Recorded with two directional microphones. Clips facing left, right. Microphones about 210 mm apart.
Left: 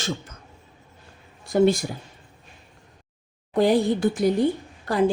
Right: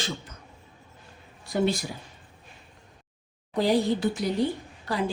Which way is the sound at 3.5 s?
50° left (ahead or behind).